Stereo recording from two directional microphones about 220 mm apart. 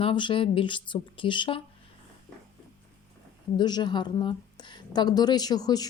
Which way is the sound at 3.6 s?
20° left (ahead or behind).